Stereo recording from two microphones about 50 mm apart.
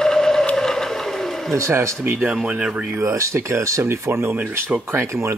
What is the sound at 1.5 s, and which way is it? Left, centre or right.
Speech, right.